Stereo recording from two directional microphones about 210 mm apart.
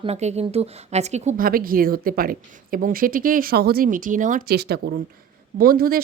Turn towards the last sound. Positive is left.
turn(degrees=-45)  # may be behind; listen again after turning